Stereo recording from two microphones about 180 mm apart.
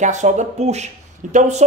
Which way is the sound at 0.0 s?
40° right (ahead or behind).